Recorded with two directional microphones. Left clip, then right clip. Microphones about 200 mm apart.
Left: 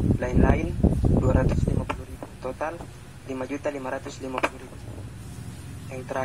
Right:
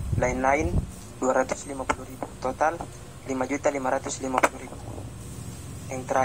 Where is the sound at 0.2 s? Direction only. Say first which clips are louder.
Right 5 dB; 20° right (ahead or behind).